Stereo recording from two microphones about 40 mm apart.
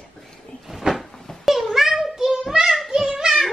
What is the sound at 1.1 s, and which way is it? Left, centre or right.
Cat, centre.